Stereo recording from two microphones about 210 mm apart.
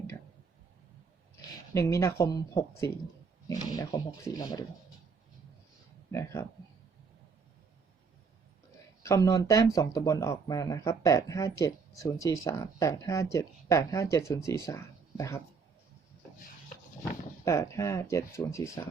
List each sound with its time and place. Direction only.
1.7 s speech: 15° left (ahead or behind)
6.1 s speech: 15° left (ahead or behind)
9.0 s speech: 15° left (ahead or behind)
17.4 s speech: 15° left (ahead or behind)